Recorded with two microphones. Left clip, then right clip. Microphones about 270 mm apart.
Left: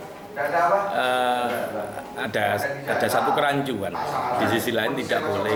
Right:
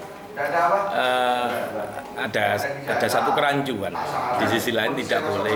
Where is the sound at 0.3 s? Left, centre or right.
Centre.